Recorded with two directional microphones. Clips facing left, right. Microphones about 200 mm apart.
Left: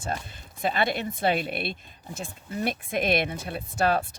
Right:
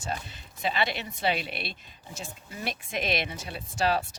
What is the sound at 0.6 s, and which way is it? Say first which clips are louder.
A woman's voice: left 4 dB; 50° left (ahead or behind).